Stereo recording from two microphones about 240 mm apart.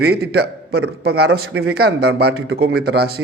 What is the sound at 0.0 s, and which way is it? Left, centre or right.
A man's voice, right.